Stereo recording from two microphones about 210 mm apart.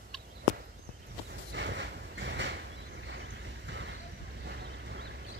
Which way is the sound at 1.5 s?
55° right (ahead or behind).